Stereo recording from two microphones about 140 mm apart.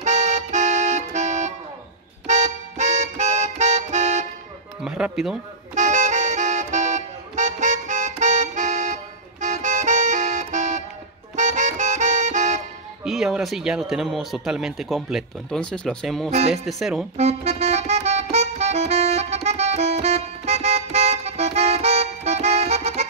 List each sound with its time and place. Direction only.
0.0 s accordion: 55° right (ahead or behind)
2.2 s music: 55° right (ahead or behind)
4.8 s speech: 5° right (ahead or behind)
5.8 s accordion: 60° right (ahead or behind)
11.3 s music: 60° right (ahead or behind)
13.0 s speech: 5° right (ahead or behind)
16.3 s speech: 50° right (ahead or behind)
16.6 s speech: centre (ahead or behind)
17.2 s music: 50° right (ahead or behind)